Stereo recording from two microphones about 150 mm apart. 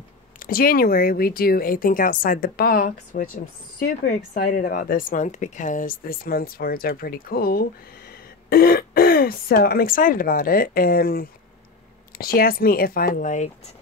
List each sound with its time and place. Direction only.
0.4 s speech: 75° left (ahead or behind)
3.8 s speech: 60° left (ahead or behind)